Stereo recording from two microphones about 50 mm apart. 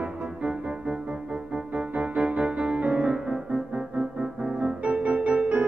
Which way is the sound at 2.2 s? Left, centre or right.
Right.